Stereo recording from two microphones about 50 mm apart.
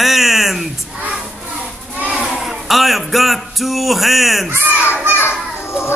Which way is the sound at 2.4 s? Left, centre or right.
Centre.